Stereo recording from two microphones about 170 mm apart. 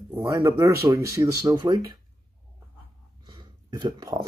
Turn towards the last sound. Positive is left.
turn(degrees=-25)  # may be behind; listen again after turning